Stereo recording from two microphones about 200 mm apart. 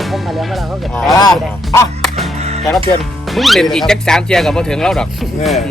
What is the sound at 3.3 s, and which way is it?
Speech, centre (ahead or behind).